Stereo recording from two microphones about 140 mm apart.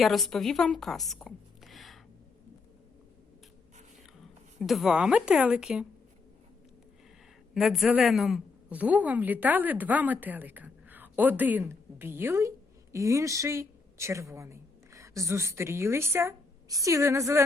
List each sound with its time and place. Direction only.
0.0 s a woman's voice: centre (ahead or behind)
4.6 s a woman's voice: centre (ahead or behind)
7.5 s a woman's voice: 5° right (ahead or behind); by 17.4 s 20° right (ahead or behind)